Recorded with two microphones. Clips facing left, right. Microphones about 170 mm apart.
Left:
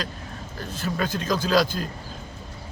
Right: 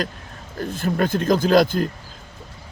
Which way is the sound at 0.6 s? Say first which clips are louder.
Right 6 dB; 50° right (ahead or behind).